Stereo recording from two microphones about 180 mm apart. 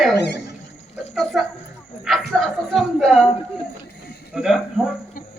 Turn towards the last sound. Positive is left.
turn(degrees=0)  # may be behind; listen again after turning